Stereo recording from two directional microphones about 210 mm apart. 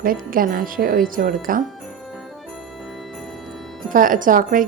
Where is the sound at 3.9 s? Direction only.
40° right (ahead or behind).